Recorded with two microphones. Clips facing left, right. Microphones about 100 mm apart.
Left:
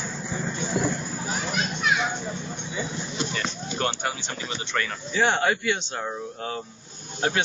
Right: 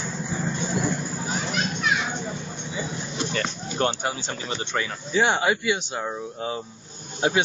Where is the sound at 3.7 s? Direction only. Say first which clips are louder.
Right 4 dB; 30° right (ahead or behind).